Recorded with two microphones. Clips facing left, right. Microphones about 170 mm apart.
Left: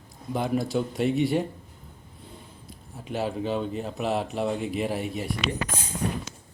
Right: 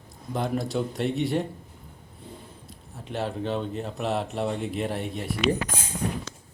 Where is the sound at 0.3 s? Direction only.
Centre (ahead or behind).